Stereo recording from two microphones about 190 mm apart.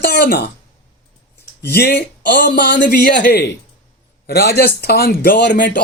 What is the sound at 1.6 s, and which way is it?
Speech, 60° left (ahead or behind).